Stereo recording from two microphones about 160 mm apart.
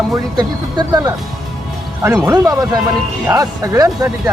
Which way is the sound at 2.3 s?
25° right (ahead or behind).